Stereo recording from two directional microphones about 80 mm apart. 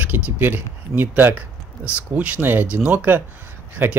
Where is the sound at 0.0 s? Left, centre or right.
Right.